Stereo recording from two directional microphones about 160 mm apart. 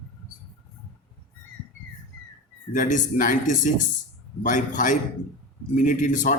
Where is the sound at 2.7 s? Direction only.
55° left (ahead or behind).